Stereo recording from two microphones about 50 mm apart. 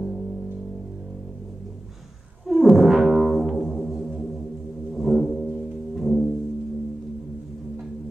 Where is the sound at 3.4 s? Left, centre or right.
Centre.